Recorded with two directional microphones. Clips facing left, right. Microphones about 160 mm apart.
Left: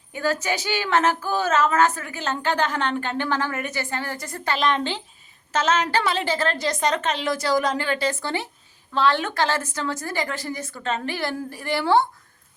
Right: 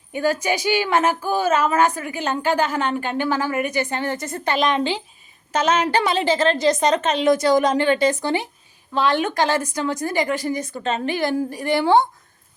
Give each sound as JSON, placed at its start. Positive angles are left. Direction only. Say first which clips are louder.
{"t": 0.1, "sound": "a woman's voice", "louder": "right 4 dB", "side_deg": -15}